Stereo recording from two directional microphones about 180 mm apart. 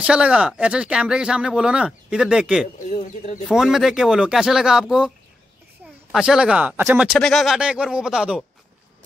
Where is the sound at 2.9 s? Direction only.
45° left (ahead or behind).